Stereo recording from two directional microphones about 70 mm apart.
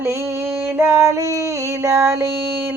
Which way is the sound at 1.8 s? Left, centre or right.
Right.